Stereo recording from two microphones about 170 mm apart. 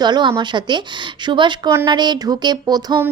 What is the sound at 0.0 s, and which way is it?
Speech, 25° right (ahead or behind).